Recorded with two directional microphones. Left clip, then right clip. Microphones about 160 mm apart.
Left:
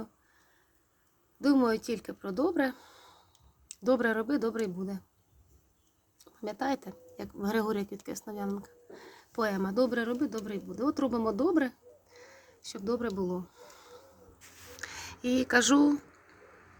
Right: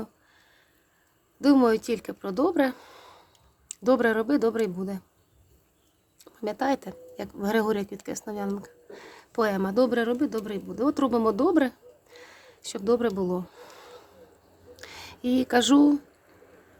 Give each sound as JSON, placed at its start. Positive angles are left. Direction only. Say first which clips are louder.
{"t": 1.4, "sound": "speech", "louder": "right 6 dB", "side_deg": -25}
{"t": 6.1, "sound": "speech", "louder": "right 6 dB", "side_deg": -20}